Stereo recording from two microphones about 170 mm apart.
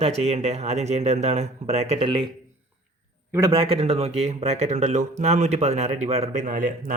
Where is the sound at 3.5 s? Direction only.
30° right (ahead or behind).